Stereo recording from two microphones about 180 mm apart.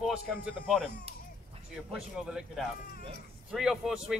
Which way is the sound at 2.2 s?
5° right (ahead or behind).